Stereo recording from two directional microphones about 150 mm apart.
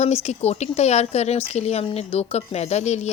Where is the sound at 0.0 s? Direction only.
45° left (ahead or behind).